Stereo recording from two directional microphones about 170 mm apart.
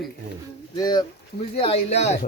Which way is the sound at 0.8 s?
25° left (ahead or behind).